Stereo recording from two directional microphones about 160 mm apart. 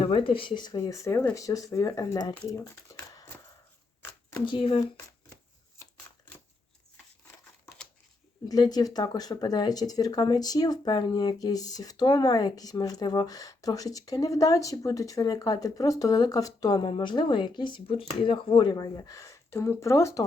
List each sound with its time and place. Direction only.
0.0 s speech: 35° left (ahead or behind); by 3.2 s 20° left (ahead or behind)
4.4 s speech: 35° left (ahead or behind)
8.4 s speech: 25° left (ahead or behind)